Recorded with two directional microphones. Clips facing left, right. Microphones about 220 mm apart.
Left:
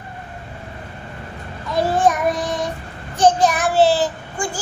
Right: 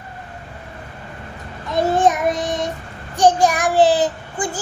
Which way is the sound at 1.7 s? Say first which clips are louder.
Right 1 dB; 20° right (ahead or behind).